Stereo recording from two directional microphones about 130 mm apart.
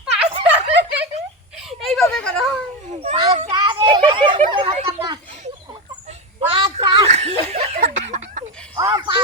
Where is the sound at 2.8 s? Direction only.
55° right (ahead or behind).